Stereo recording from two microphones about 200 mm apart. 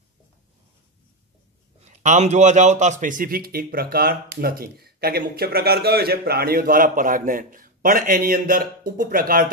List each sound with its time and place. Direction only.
1.9 s a man's voice: 35° right (ahead or behind)